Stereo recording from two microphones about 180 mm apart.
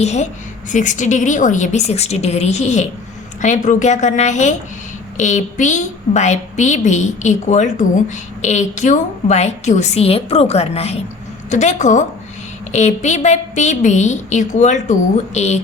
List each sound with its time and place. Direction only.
0.0 s a woman's voice: 40° left (ahead or behind)